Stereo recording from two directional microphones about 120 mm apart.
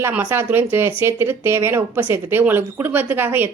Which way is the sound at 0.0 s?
15° right (ahead or behind).